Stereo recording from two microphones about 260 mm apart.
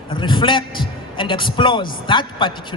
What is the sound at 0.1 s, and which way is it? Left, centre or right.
A man's voice, centre.